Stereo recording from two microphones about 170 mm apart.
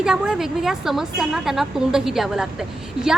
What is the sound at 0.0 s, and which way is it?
A woman's voice, 5° right (ahead or behind).